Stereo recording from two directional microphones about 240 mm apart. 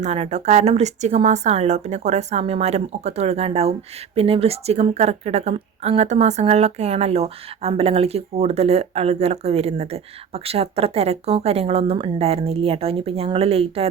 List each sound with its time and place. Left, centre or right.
0.0 s speech: right